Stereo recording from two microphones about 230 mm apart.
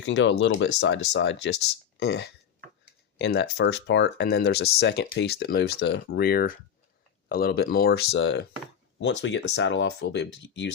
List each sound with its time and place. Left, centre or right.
0.0 s speech: left